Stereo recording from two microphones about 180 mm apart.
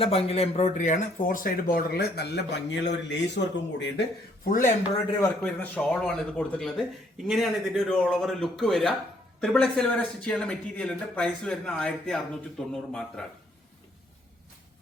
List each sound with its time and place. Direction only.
0.0 s speech: 35° left (ahead or behind); by 4.0 s 75° left (ahead or behind)
4.4 s speech: 45° left (ahead or behind)
5.4 s speech: 5° left (ahead or behind)